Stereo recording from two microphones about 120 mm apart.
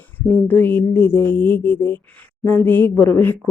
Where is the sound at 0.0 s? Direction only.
15° left (ahead or behind).